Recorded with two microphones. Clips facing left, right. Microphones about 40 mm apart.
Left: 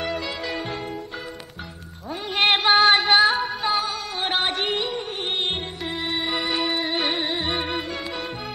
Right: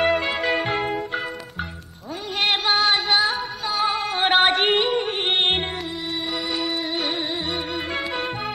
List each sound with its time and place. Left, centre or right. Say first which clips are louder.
0.0 s music: right 7 dB; right
2.3 s music: left 3 dB; centre
3.8 s music: right 6 dB; right
6.3 s music: left 1 dB; centre